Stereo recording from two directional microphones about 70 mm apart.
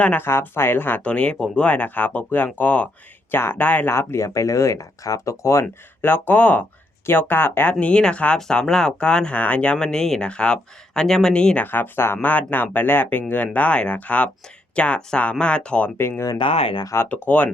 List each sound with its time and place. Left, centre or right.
0.2 s speech: left
3.9 s speech: left
6.0 s speech: left
9.7 s speech: centre
11.6 s speech: left
16.0 s speech: left
16.2 s speech: left
17.2 s speech: left